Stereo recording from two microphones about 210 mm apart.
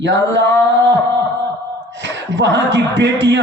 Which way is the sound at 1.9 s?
60° right (ahead or behind).